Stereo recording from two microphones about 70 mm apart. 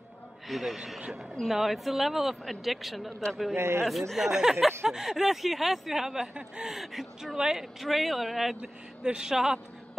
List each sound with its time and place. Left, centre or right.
0.5 s speech: centre
3.5 s a man's voice: right
4.1 s speech: centre
6.7 s speech: centre
8.5 s speech: centre